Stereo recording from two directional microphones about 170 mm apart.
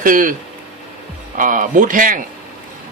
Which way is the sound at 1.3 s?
50° right (ahead or behind).